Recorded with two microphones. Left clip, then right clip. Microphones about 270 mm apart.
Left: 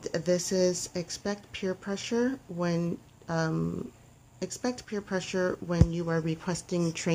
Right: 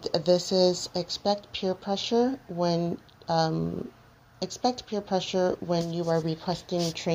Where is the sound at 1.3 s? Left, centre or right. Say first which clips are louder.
Right 11 dB; centre.